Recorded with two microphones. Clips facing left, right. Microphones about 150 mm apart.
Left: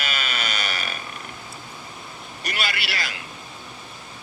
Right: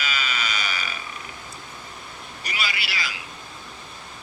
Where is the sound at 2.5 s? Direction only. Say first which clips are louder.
Left 2 dB; 60° left (ahead or behind).